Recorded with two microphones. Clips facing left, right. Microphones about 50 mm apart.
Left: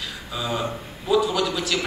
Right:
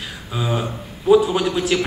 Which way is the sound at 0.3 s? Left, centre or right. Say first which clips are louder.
Right 3 dB; right.